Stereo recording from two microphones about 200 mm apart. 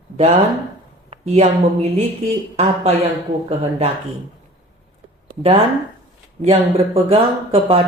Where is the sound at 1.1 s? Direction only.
30° right (ahead or behind).